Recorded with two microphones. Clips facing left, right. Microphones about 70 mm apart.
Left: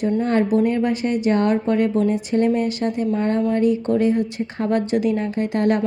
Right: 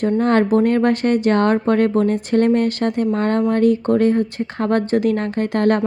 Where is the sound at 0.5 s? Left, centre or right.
Right.